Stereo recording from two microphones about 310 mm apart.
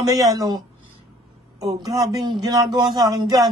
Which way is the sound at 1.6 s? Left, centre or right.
Centre.